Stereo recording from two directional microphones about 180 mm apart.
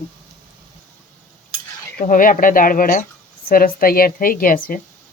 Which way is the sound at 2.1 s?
50° left (ahead or behind).